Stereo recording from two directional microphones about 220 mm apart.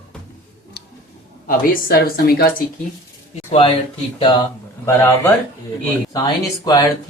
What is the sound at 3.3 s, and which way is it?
Speech, 25° left (ahead or behind).